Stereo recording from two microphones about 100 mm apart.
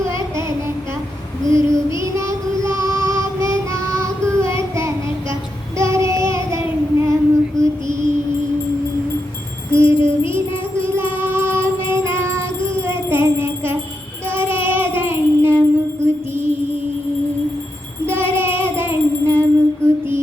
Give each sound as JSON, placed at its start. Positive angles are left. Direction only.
{"t": 0.1, "sound": "child singing", "side_deg": -30}
{"t": 9.7, "sound": "music", "side_deg": -25}
{"t": 14.3, "sound": "child singing", "side_deg": -25}
{"t": 16.3, "sound": "music", "side_deg": -20}
{"t": 18.0, "sound": "music", "side_deg": -20}